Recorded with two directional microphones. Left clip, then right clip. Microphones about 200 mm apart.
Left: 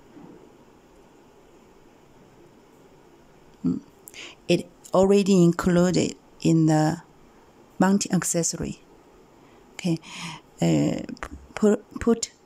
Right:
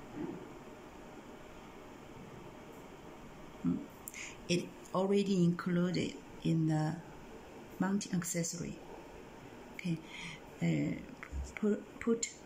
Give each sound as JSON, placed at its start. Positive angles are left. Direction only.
{"t": 4.5, "sound": "speech", "side_deg": 65}
{"t": 7.8, "sound": "speech", "side_deg": 70}
{"t": 9.8, "sound": "speech", "side_deg": 70}
{"t": 11.5, "sound": "a sound", "side_deg": 60}